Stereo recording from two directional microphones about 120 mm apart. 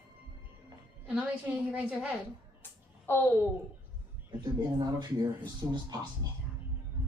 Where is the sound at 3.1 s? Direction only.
20° left (ahead or behind).